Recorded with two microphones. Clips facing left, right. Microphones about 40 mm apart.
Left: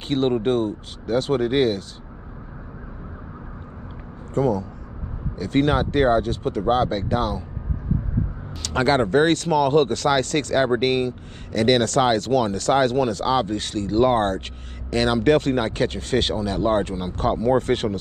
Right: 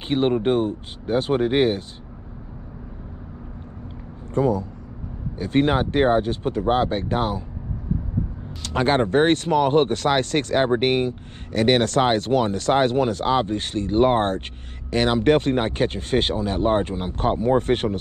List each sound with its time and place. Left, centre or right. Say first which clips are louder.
0.1 s speech: right 1 dB; centre
4.3 s speech: even; right
8.8 s speech: even; right